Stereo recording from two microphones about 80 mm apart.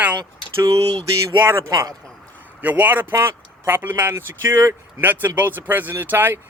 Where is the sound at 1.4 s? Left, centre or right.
Right.